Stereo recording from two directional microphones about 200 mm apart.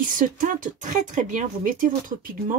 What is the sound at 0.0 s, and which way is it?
Speech, 40° right (ahead or behind).